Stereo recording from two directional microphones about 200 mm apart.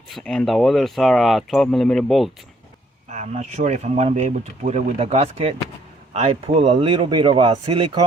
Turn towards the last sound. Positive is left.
turn(degrees=-25)  # may be behind; listen again after turning